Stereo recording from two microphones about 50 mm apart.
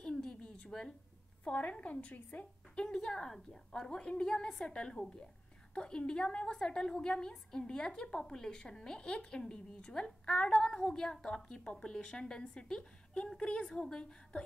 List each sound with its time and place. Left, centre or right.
0.0 s a sound: centre
1.4 s a woman's voice: left
2.7 s a woman's voice: centre